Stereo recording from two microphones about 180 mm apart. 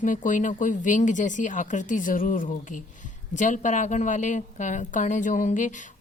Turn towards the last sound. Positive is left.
turn(degrees=45)  # may be behind; listen again after turning